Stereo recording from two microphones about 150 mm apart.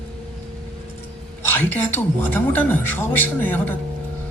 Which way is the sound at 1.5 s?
15° left (ahead or behind).